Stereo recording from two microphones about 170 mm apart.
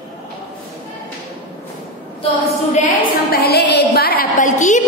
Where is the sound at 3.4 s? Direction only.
70° left (ahead or behind); by 4.8 s 50° left (ahead or behind).